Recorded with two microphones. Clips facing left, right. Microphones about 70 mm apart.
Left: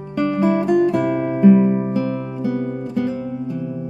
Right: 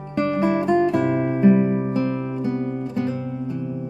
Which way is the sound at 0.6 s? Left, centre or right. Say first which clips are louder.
Left 2 dB; centre.